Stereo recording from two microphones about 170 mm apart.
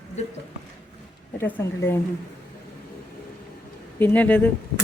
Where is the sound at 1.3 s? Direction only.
15° left (ahead or behind).